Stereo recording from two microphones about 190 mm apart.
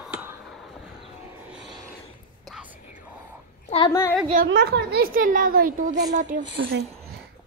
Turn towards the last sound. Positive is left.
turn(degrees=-60)  # may be behind; listen again after turning